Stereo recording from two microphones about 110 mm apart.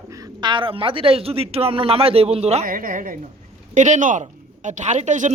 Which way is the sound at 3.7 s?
90° right.